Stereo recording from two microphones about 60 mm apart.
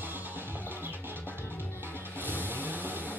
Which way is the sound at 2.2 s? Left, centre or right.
Right.